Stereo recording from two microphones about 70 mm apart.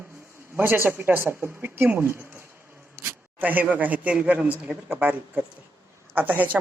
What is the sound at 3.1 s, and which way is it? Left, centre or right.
Speech, right.